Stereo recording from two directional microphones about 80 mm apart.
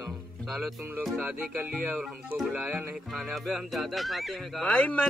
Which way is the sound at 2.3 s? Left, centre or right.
Centre.